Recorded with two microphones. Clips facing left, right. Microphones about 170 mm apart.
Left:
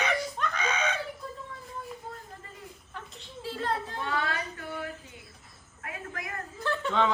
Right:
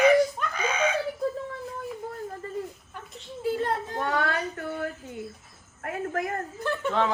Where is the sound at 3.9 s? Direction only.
60° right (ahead or behind).